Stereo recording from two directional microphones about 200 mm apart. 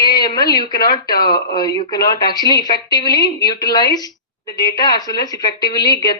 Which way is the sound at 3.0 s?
25° right (ahead or behind).